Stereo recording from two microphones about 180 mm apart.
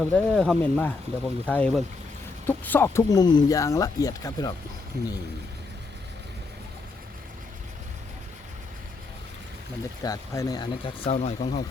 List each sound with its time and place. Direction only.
0.0 s speech: 5° left (ahead or behind)
10.0 s speech: 20° left (ahead or behind); by 11.6 s 35° left (ahead or behind)